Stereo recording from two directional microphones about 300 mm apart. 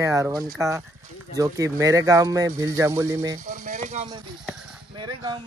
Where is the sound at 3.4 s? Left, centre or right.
Right.